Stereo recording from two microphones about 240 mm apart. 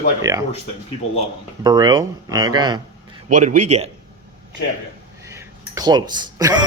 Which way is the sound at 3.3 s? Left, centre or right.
Right.